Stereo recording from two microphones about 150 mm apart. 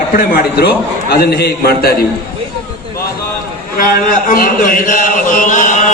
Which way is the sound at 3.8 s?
70° left (ahead or behind).